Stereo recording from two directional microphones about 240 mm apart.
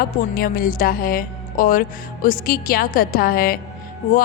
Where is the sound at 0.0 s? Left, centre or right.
Left.